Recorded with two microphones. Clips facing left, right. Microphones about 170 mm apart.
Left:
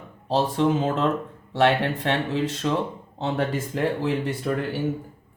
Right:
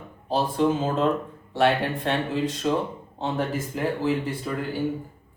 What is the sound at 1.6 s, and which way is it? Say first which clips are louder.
Speech: left 1 dB; 70° left (ahead or behind).